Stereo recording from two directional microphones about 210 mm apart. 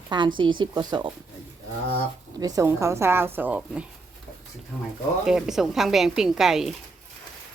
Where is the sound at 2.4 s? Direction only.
15° right (ahead or behind).